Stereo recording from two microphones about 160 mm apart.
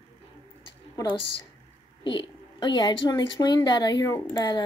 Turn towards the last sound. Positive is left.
turn(degrees=15)  # may be behind; listen again after turning